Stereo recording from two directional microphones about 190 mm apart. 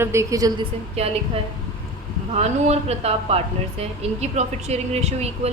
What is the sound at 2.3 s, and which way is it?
Speech, 35° right (ahead or behind).